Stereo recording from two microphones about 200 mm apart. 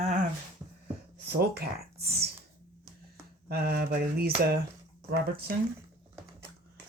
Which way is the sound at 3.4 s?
50° right (ahead or behind).